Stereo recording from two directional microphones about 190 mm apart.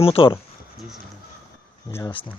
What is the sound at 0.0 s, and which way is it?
Speech, 30° left (ahead or behind).